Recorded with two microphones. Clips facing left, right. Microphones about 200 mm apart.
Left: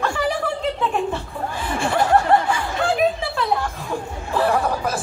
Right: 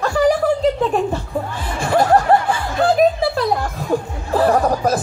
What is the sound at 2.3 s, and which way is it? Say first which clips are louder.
Snicker: right 2 dB; 35° right (ahead or behind).